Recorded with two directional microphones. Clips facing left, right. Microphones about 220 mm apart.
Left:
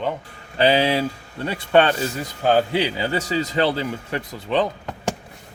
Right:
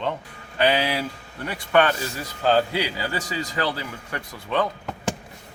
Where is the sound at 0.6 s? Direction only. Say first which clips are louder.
Left 4 dB; 25° left (ahead or behind).